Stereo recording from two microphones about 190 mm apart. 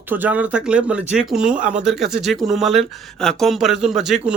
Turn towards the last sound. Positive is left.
turn(degrees=0)  # may be behind; listen again after turning